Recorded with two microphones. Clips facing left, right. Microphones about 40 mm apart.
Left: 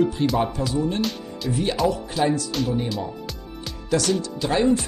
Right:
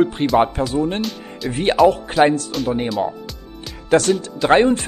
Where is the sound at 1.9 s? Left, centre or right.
Right.